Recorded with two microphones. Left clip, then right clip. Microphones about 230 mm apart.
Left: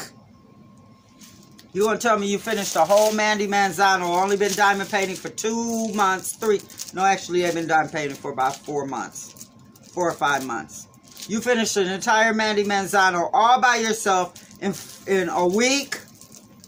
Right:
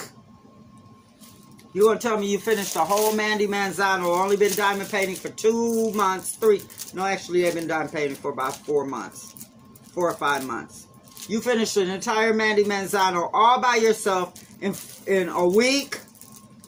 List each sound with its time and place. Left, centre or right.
1.7 s a man's voice: left